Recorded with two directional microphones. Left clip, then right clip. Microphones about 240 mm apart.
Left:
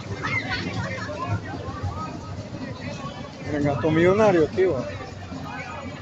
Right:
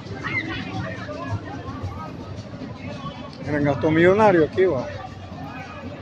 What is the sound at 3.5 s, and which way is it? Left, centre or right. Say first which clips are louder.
Speech: right 2 dB; centre.